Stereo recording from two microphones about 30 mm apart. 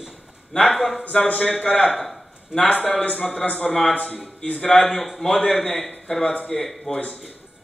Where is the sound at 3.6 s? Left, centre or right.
Left.